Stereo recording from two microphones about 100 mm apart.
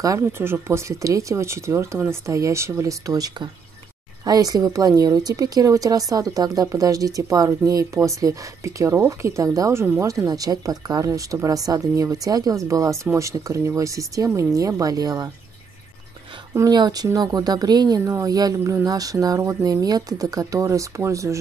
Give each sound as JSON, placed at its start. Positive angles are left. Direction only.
{"t": 0.0, "sound": "a woman's voice", "side_deg": -35}
{"t": 16.5, "sound": "a woman's voice", "side_deg": -40}
{"t": 18.0, "sound": "a woman's voice", "side_deg": -35}